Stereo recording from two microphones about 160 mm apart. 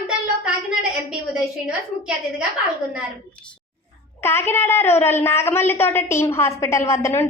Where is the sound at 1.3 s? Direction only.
5° right (ahead or behind).